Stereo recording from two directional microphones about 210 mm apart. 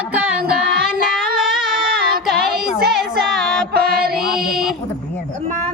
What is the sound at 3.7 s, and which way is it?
Mantra, 45° right (ahead or behind).